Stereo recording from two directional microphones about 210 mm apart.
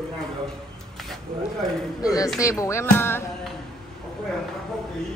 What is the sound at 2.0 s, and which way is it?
Speech, 15° left (ahead or behind).